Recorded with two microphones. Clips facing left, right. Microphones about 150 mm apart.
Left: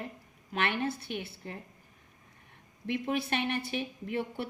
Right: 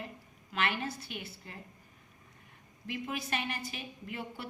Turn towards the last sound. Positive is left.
turn(degrees=60)  # may be behind; listen again after turning